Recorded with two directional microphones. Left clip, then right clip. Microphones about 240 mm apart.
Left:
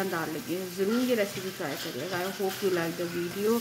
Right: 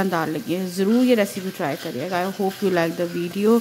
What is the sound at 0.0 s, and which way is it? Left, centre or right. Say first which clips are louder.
Speech: right 8 dB; right.